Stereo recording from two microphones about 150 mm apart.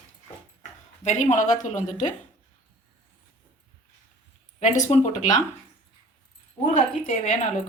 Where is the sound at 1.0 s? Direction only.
50° left (ahead or behind).